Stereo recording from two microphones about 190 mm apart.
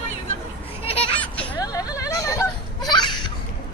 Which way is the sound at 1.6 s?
20° left (ahead or behind).